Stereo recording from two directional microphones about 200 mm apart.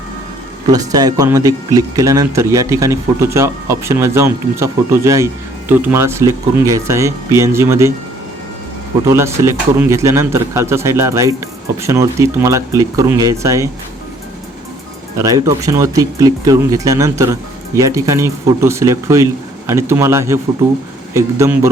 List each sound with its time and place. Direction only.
0.7 s speech: 20° right (ahead or behind)
9.0 s speech: 15° right (ahead or behind)
15.2 s speech: 15° right (ahead or behind)